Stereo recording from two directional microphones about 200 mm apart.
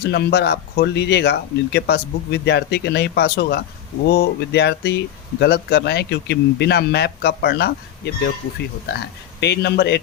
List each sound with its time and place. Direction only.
0.0 s speech: 55° left (ahead or behind)
9.4 s speech: 55° left (ahead or behind)